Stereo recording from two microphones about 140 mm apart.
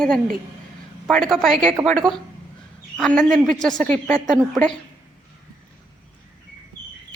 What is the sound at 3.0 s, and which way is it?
A woman's voice, 5° left (ahead or behind).